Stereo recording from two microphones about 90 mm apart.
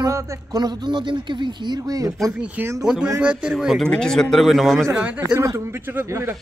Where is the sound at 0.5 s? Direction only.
50° right (ahead or behind).